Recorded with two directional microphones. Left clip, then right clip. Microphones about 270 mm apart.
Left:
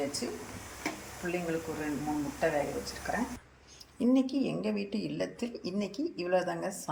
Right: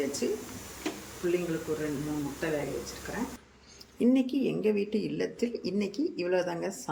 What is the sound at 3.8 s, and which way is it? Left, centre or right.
Speech, centre.